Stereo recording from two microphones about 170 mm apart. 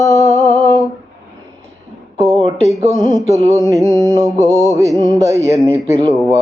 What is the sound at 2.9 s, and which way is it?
Music, 20° right (ahead or behind).